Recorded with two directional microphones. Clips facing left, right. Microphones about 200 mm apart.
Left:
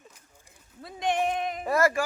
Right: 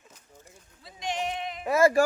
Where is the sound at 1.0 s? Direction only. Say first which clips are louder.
Left 5 dB; 55° left (ahead or behind).